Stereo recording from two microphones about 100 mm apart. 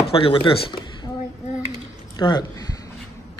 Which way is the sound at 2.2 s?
50° left (ahead or behind).